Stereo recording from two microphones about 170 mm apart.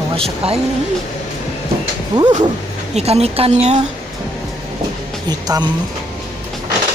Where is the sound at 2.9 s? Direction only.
35° right (ahead or behind).